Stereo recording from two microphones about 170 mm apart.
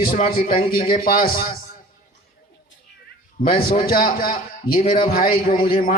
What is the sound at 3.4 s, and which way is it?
A man's voice, 60° left (ahead or behind).